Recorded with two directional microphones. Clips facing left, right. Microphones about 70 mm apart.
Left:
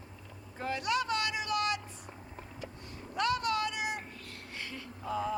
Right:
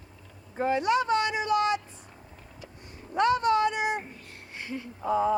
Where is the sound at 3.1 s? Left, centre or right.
Right.